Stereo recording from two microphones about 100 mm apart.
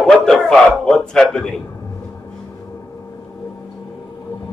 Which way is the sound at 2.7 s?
30° left (ahead or behind).